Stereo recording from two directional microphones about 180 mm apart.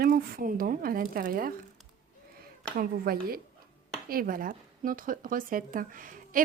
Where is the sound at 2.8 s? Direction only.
55° right (ahead or behind).